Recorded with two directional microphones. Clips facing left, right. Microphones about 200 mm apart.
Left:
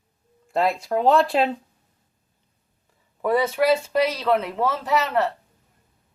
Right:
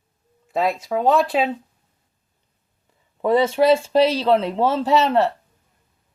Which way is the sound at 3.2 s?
25° right (ahead or behind).